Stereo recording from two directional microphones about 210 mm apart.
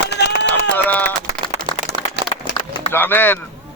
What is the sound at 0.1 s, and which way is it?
Run, 55° left (ahead or behind).